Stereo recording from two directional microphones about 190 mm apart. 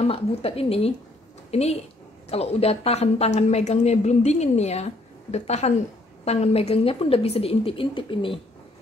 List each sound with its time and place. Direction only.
0.0 s a woman's voice: 30° left (ahead or behind)